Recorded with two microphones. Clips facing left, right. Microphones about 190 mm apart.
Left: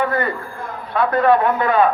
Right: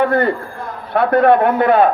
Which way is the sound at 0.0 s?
55° right (ahead or behind).